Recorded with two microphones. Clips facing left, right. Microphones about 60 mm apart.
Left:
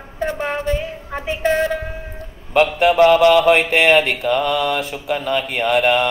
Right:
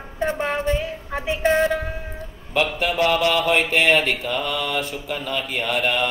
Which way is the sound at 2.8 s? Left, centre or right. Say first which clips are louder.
Left 10 dB; left.